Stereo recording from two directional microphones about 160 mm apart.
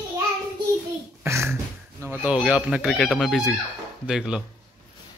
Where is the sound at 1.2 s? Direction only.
15° right (ahead or behind).